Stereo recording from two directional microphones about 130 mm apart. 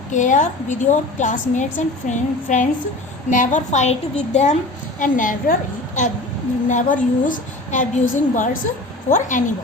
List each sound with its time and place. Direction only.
0.1 s a woman's voice: 75° left (ahead or behind)
4.9 s a woman's voice: 90° left; by 9.4 s 65° left (ahead or behind)